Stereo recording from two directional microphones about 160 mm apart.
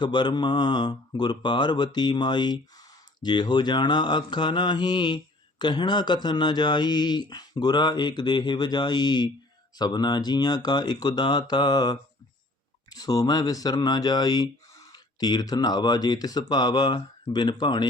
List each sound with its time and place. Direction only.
0.0 s speech: 30° left (ahead or behind)